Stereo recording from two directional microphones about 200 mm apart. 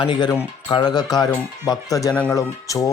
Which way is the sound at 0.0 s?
20° left (ahead or behind).